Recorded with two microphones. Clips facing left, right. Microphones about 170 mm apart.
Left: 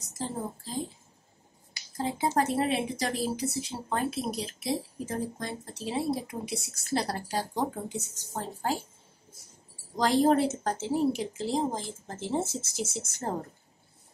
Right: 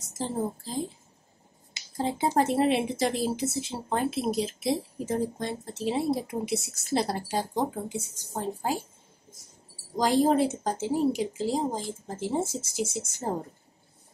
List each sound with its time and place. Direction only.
1.7 s speech: 25° right (ahead or behind)
7.7 s speech: 10° right (ahead or behind)
9.9 s speech: 10° right (ahead or behind)